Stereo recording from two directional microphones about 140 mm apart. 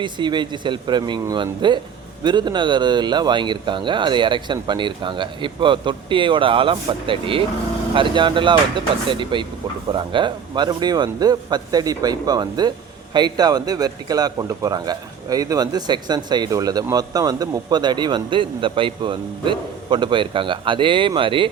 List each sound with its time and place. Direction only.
0.0 s a man's voice: 35° right (ahead or behind)